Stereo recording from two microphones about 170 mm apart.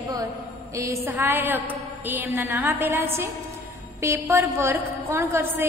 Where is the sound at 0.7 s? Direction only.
15° right (ahead or behind).